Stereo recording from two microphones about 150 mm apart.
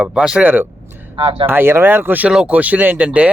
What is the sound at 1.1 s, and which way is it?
Speech, 35° right (ahead or behind).